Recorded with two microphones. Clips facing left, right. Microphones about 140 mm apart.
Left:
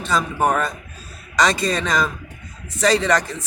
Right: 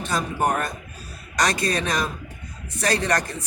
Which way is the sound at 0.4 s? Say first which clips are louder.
Left 3 dB; 90° left.